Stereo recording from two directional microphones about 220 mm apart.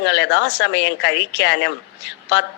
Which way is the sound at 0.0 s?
50° left (ahead or behind).